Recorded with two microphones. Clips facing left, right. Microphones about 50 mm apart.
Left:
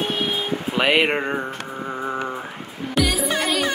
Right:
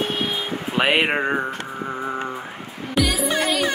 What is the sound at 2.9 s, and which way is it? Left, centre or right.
Music, centre.